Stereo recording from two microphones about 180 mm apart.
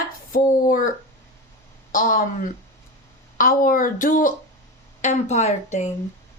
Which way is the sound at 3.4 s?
50° left (ahead or behind).